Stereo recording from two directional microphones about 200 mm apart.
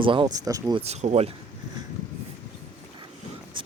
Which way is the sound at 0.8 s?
35° right (ahead or behind).